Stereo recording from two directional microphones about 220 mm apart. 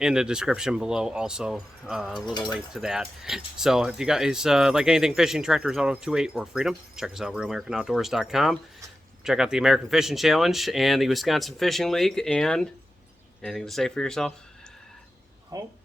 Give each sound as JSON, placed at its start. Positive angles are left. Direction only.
{"t": 0.0, "sound": "speech", "side_deg": -5}
{"t": 15.5, "sound": "speech", "side_deg": -15}